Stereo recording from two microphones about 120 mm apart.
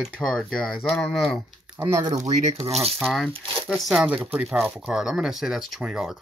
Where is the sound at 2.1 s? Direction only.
70° right (ahead or behind).